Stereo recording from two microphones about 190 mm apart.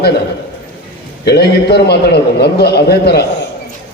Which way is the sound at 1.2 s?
60° left (ahead or behind).